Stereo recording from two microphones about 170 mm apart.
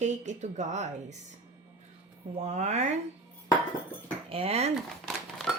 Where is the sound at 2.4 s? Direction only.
45° right (ahead or behind).